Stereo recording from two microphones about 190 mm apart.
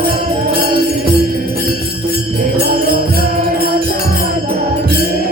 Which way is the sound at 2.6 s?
50° right (ahead or behind).